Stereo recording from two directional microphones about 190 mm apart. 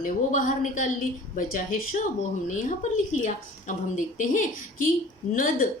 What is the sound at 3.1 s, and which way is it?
A woman's voice, 40° left (ahead or behind).